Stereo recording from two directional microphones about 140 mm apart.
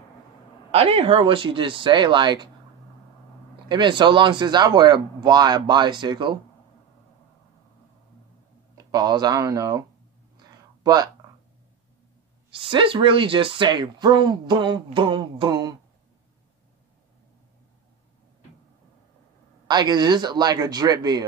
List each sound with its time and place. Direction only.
0.7 s speech: 45° right (ahead or behind)
3.6 s speech: 30° right (ahead or behind)
8.7 s speech: 30° right (ahead or behind)
12.5 s speech: 40° right (ahead or behind)
19.7 s speech: 30° right (ahead or behind)